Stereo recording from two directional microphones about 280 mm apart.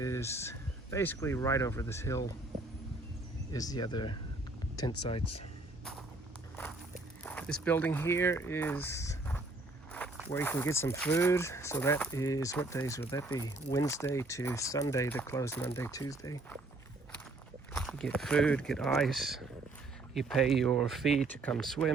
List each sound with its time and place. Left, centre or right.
0.0 s speech: centre
3.5 s speech: centre
6.6 s walk: centre
9.9 s speech: centre
17.7 s speech: centre